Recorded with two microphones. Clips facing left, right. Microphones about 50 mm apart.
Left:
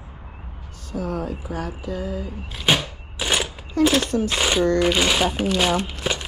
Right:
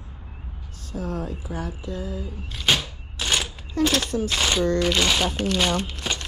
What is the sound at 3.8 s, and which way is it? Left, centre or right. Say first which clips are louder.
Speech: left 4 dB; centre.